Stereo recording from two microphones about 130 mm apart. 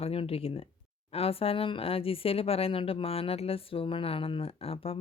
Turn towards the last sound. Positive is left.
turn(degrees=50)  # may be behind; listen again after turning